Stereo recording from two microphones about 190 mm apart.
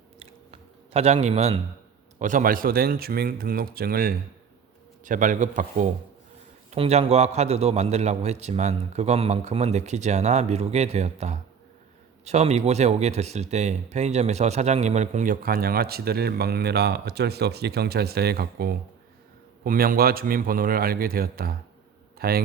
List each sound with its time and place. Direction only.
0.2 s chewing: 30° right (ahead or behind)
2.1 s a man's voice: 40° right (ahead or behind)